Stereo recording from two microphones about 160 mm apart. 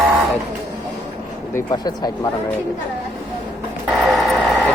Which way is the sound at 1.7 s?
25° left (ahead or behind).